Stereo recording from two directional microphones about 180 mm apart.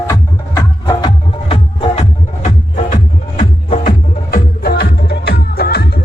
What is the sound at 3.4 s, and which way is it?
Music, 45° left (ahead or behind).